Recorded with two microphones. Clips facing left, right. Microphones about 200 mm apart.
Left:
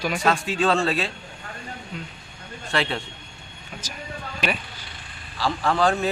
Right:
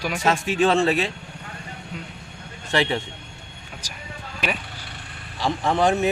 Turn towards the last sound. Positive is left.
turn(degrees=-20)  # may be behind; listen again after turning